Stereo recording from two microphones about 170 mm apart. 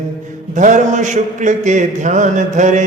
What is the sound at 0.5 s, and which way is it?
A man's voice, 45° right (ahead or behind).